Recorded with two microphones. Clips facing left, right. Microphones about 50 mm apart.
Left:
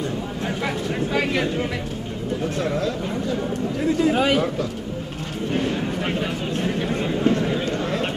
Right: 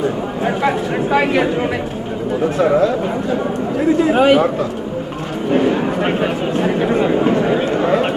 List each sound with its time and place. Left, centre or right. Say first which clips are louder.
0.5 s a man's voice: right 9 dB; right
3.8 s speech: right 7 dB; right
5.5 s a sound: right 9 dB; centre
6.5 s speech: right 8 dB; centre